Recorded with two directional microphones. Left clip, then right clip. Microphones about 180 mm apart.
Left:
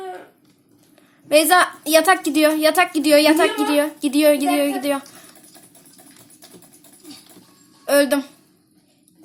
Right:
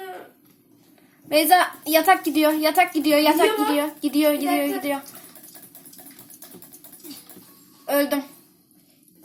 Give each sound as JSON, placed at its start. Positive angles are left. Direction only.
{"t": 1.3, "sound": "a woman's voice", "side_deg": 40}
{"t": 7.9, "sound": "a woman's voice", "side_deg": 35}